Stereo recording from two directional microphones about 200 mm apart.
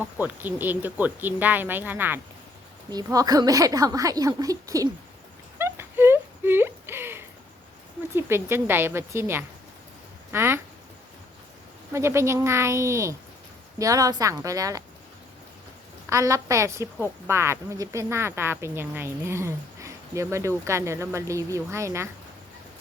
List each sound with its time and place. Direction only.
0.0 s speech: 10° right (ahead or behind)
5.5 s a sound: 10° right (ahead or behind)
8.1 s speech: 10° right (ahead or behind)
11.9 s speech: 15° right (ahead or behind)
16.0 s speech: 15° right (ahead or behind)